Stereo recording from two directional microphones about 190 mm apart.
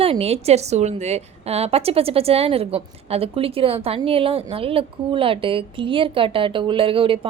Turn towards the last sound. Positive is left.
turn(degrees=-30)  # may be behind; listen again after turning